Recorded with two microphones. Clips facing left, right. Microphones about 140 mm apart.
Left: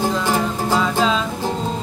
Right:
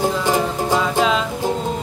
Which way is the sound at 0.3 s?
15° right (ahead or behind).